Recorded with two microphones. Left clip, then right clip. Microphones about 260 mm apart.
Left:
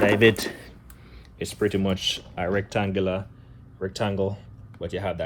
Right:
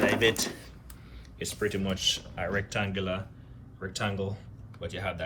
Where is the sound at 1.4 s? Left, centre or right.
Left.